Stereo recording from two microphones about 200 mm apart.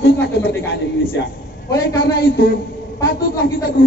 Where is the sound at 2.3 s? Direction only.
50° left (ahead or behind).